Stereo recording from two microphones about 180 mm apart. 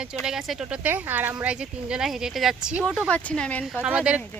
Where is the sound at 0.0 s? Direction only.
5° right (ahead or behind).